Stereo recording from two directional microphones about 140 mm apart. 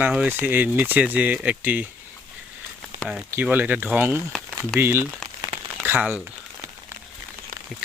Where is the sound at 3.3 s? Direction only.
10° right (ahead or behind).